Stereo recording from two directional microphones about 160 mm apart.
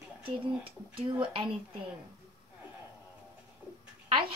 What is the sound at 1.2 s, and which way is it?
Speech, 30° right (ahead or behind).